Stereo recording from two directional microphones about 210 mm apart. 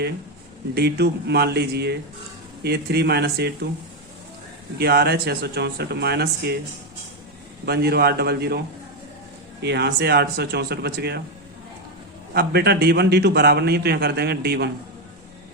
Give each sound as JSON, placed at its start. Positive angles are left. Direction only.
{"t": 0.7, "sound": "a man's voice", "side_deg": -50}
{"t": 4.8, "sound": "a man's voice", "side_deg": -50}
{"t": 7.6, "sound": "a man's voice", "side_deg": -50}
{"t": 12.3, "sound": "a man's voice", "side_deg": -50}